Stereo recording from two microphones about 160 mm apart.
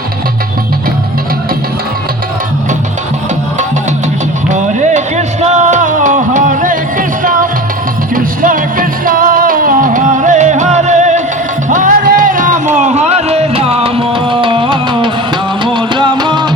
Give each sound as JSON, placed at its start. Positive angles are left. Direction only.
{"t": 4.4, "sound": "music", "side_deg": -50}